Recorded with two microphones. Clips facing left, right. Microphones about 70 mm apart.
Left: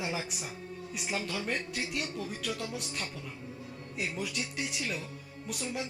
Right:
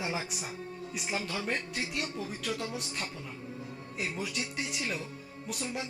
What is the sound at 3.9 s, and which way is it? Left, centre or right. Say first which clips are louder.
Speech: even; centre.